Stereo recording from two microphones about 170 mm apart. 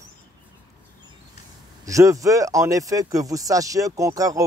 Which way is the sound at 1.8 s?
20° right (ahead or behind).